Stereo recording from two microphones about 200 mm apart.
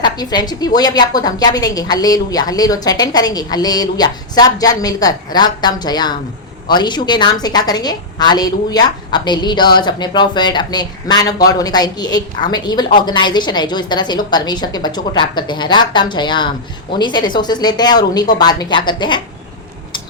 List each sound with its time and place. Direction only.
0.0 s a woman's voice: 20° left (ahead or behind)